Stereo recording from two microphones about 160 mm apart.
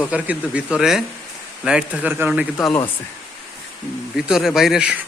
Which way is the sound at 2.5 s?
10° left (ahead or behind).